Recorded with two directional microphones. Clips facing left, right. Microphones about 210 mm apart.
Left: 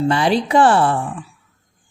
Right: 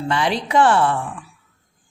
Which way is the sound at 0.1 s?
35° left (ahead or behind).